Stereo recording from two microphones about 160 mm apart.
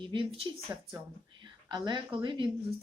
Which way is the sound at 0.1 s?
35° right (ahead or behind).